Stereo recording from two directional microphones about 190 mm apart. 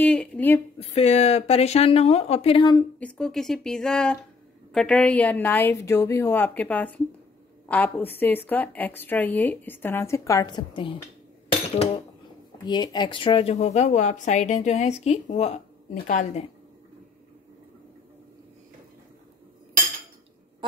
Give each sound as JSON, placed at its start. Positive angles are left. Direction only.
{"t": 0.0, "sound": "a woman's voice", "side_deg": 5}
{"t": 0.7, "sound": "speech", "side_deg": 35}
{"t": 3.0, "sound": "a woman's voice", "side_deg": 5}
{"t": 11.4, "sound": "a sound", "side_deg": 30}
{"t": 12.6, "sound": "speech", "side_deg": 25}